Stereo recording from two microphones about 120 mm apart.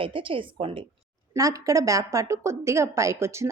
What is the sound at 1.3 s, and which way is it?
A woman's voice, 30° right (ahead or behind).